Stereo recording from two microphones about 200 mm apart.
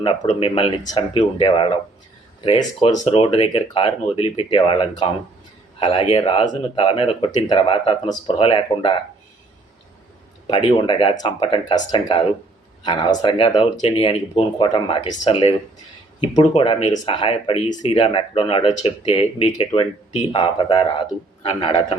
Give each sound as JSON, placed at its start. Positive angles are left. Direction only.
{"t": 0.3, "sound": "speech", "side_deg": 25}
{"t": 10.4, "sound": "speech", "side_deg": 25}